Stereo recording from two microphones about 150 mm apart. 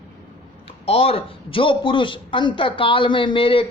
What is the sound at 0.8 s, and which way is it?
Speech, 40° left (ahead or behind).